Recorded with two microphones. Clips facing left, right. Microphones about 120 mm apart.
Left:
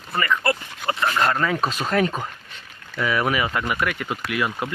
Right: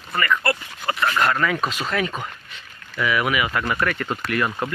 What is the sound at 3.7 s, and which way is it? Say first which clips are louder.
Speech: right 1 dB; 10° left (ahead or behind).